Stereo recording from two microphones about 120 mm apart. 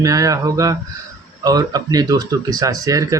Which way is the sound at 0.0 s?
30° right (ahead or behind).